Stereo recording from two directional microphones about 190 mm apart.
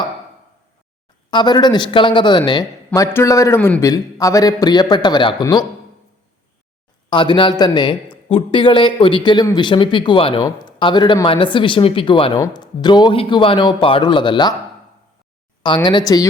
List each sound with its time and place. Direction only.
1.3 s a man's voice: 25° left (ahead or behind)
7.1 s a man's voice: 25° left (ahead or behind)
15.6 s a man's voice: 25° left (ahead or behind)